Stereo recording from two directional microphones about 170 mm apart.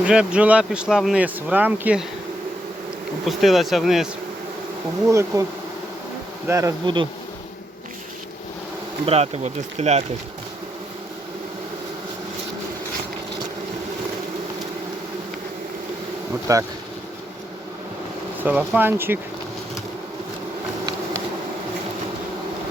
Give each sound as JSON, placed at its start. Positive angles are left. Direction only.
{"t": 0.0, "sound": "speech", "side_deg": -5}
{"t": 3.2, "sound": "speech", "side_deg": 0}
{"t": 5.1, "sound": "speech", "side_deg": -20}
{"t": 6.5, "sound": "bee", "side_deg": -20}
{"t": 9.0, "sound": "speech", "side_deg": -40}
{"t": 16.5, "sound": "bee", "side_deg": -20}
{"t": 18.4, "sound": "speech", "side_deg": -10}